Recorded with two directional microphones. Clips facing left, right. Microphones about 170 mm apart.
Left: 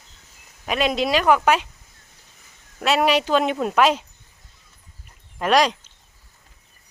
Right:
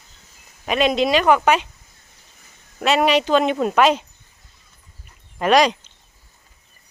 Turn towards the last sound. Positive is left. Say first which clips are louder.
# right 3 dB
turn(degrees=0)  # may be behind; listen again after turning